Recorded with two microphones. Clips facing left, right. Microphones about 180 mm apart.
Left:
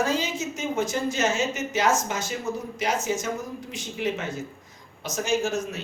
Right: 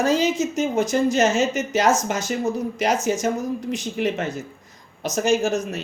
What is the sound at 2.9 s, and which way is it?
Speech, 40° right (ahead or behind).